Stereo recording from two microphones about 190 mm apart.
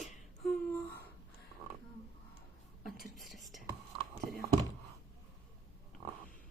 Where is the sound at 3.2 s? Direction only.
Centre (ahead or behind).